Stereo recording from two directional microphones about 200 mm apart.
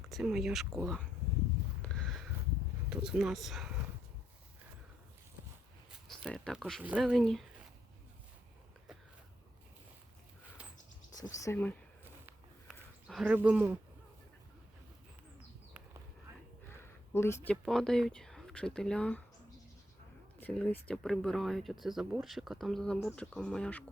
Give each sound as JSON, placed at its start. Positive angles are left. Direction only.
{"t": 0.0, "sound": "speech", "side_deg": -5}
{"t": 1.8, "sound": "a sound", "side_deg": 5}
{"t": 2.9, "sound": "speech", "side_deg": -5}
{"t": 6.1, "sound": "speech", "side_deg": 0}
{"t": 10.6, "sound": "bird", "side_deg": -5}
{"t": 11.1, "sound": "speech", "side_deg": 15}
{"t": 12.2, "sound": "a sound", "side_deg": 0}
{"t": 16.6, "sound": "speech", "side_deg": 10}
{"t": 20.4, "sound": "speech", "side_deg": 5}